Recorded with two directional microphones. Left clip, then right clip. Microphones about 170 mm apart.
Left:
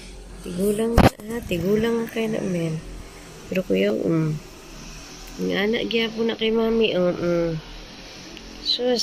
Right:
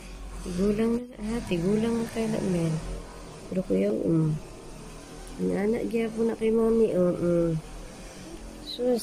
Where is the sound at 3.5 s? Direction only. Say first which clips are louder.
Left 5 dB; centre (ahead or behind).